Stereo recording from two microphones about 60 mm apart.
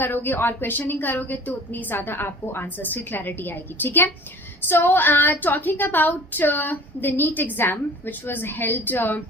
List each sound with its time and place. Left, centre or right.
0.0 s a woman's voice: left